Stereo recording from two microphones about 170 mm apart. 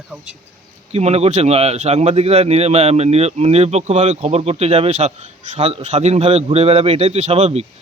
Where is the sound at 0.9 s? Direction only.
40° right (ahead or behind).